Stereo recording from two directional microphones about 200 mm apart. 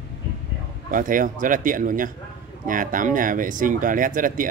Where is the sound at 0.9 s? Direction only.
40° right (ahead or behind).